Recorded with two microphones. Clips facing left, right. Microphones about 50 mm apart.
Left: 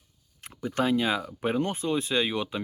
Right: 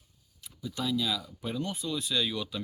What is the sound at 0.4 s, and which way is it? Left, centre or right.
Speech, left.